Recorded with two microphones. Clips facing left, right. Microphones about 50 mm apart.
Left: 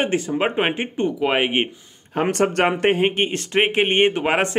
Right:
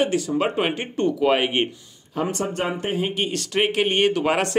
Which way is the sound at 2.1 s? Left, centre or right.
Left.